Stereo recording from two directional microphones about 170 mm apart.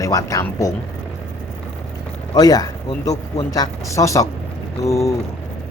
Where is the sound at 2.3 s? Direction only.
20° left (ahead or behind).